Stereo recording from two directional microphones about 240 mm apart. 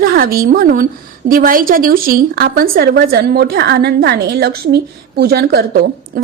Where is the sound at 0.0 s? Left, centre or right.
Right.